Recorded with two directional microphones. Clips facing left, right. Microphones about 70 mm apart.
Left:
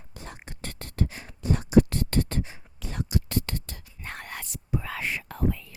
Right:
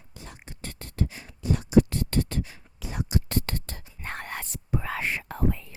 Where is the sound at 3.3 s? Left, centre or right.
Right.